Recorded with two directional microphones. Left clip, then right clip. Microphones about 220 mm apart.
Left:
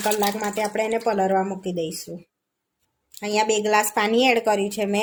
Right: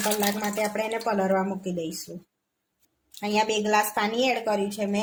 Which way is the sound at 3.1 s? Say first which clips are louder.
Left 3 dB; 15° left (ahead or behind).